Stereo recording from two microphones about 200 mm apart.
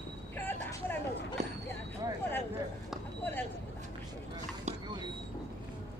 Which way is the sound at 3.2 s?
10° left (ahead or behind).